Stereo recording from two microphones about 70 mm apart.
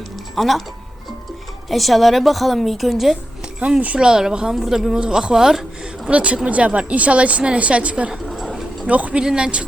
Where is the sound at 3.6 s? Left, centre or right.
Centre.